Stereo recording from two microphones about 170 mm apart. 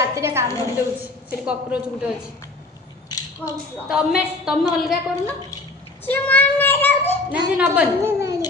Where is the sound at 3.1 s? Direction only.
25° left (ahead or behind).